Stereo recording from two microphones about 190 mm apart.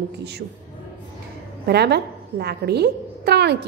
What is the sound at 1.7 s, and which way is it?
A woman's voice, 60° right (ahead or behind).